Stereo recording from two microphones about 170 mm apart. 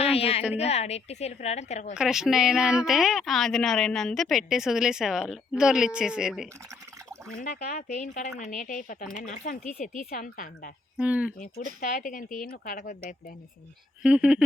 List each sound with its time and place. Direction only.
0.0 s a sound: 35° left (ahead or behind)
0.5 s a woman's voice: 40° left (ahead or behind)
2.0 s a woman's voice: 5° right (ahead or behind)
7.3 s speech: 50° left (ahead or behind)
10.9 s speech: 5° right (ahead or behind)
11.3 s speech: 55° left (ahead or behind)
14.0 s speech: 5° right (ahead or behind)